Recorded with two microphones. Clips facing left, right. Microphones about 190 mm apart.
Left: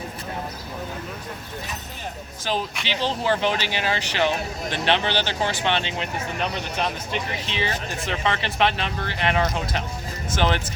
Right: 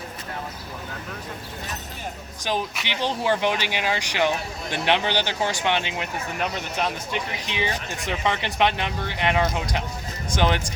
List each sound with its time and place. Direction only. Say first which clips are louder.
2.8 s speech: left 1 dB; 15° right (ahead or behind)